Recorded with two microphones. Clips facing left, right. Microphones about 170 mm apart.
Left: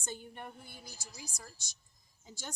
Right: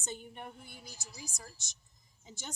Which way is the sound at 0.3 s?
15° right (ahead or behind).